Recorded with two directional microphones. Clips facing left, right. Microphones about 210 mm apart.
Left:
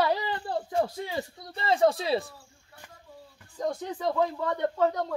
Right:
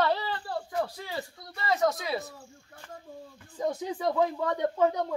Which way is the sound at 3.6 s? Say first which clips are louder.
Right 1 dB; 10° right (ahead or behind).